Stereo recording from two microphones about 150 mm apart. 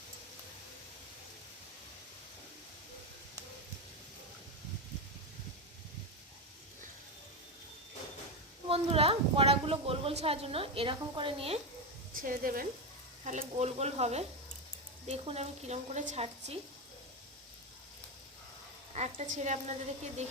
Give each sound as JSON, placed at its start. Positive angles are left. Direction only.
{"t": 8.6, "sound": "a woman's voice", "side_deg": -40}
{"t": 12.1, "sound": "a woman's voice", "side_deg": -65}
{"t": 13.2, "sound": "a woman's voice", "side_deg": -55}
{"t": 18.9, "sound": "a woman's voice", "side_deg": -45}